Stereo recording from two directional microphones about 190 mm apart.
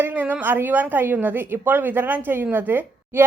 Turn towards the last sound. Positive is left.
turn(degrees=-10)  # may be behind; listen again after turning